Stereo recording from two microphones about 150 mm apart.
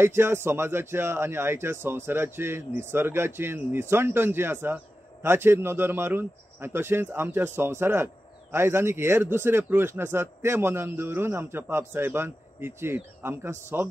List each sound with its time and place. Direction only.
0.0 s speech: 15° right (ahead or behind)